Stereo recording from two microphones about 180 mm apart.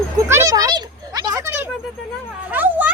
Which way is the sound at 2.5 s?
10° right (ahead or behind).